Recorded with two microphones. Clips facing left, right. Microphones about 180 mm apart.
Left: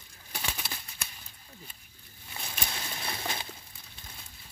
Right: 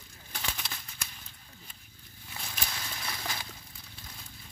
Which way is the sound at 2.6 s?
25° left (ahead or behind).